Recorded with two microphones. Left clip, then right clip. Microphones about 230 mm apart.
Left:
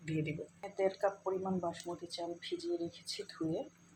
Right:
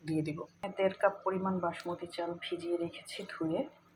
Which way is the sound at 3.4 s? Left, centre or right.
Right.